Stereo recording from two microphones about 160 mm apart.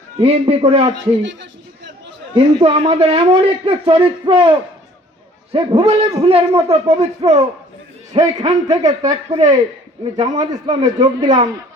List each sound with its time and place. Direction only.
0.2 s a man's voice: 40° right (ahead or behind)
2.3 s a man's voice: 35° right (ahead or behind)
8.9 s a man's voice: 25° right (ahead or behind)
9.3 s a man's voice: 45° right (ahead or behind)
10.0 s a man's voice: 30° right (ahead or behind)